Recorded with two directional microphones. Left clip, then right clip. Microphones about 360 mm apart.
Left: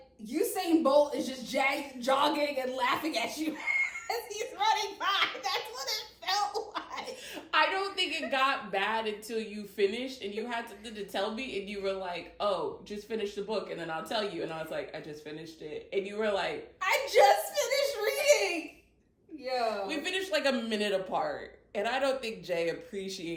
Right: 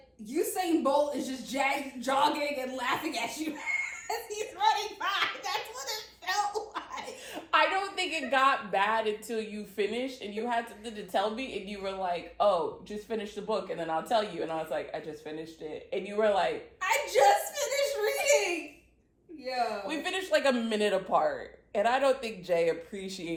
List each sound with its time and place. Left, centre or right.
0.3 s speech: centre
7.5 s a woman's voice: centre
16.8 s whimper: centre
19.5 s speech: centre
19.9 s a woman's voice: centre